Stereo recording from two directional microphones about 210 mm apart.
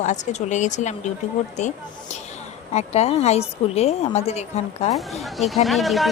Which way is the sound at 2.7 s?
30° left (ahead or behind).